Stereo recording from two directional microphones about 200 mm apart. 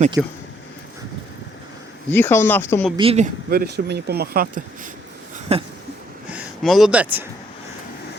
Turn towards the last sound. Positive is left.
turn(degrees=-10)  # may be behind; listen again after turning